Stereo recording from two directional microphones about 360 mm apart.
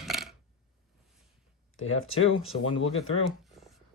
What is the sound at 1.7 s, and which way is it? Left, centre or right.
Speech, left.